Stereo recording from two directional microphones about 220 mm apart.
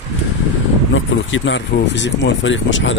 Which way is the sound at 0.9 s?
60° left (ahead or behind).